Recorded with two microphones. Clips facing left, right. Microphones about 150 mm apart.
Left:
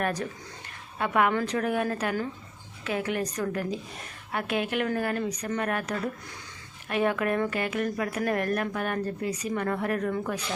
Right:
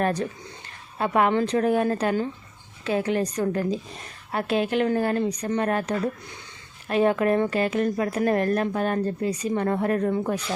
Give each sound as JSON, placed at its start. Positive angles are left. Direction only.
{"t": 0.0, "sound": "a woman's voice", "side_deg": -30}